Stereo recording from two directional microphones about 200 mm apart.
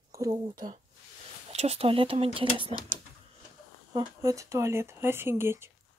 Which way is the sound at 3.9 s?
15° right (ahead or behind).